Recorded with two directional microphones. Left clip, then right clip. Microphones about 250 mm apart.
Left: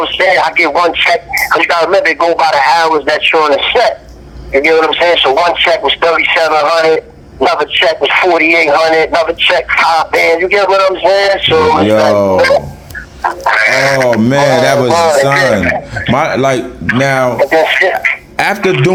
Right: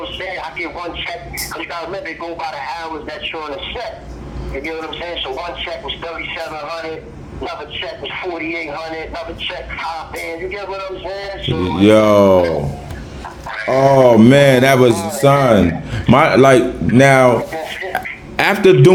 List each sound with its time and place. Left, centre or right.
0.0 s a man's voice: left
11.9 s a man's voice: centre
13.2 s a man's voice: left
14.2 s mantra: centre
14.9 s a man's voice: left
16.0 s a man's voice: centre
17.5 s a man's voice: left
18.3 s mantra: left